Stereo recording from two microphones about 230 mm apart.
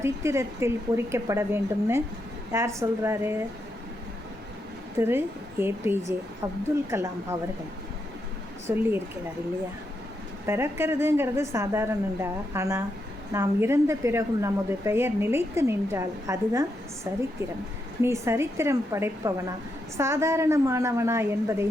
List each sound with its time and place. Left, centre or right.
0.0 s a woman's voice: centre
4.9 s a woman's voice: centre
8.7 s a woman's voice: centre
10.4 s a woman's voice: centre